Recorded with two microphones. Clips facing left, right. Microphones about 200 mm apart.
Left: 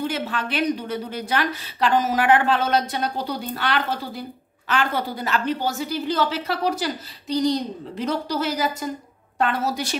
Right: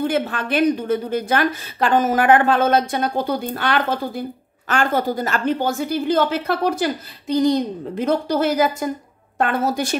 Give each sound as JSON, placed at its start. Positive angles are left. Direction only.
{"t": 0.0, "sound": "a woman's voice", "side_deg": -50}